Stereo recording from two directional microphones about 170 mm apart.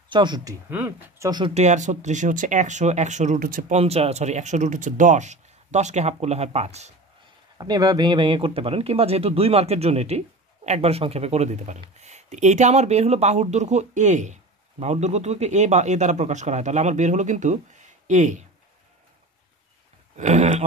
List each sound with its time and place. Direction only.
0.1 s speech: 25° right (ahead or behind)
0.7 s speech: 10° right (ahead or behind)
1.4 s speech: 40° right (ahead or behind)
3.7 s speech: 35° right (ahead or behind)
7.5 s speech: 25° right (ahead or behind); by 18.4 s 45° right (ahead or behind)
20.2 s speech: 45° right (ahead or behind)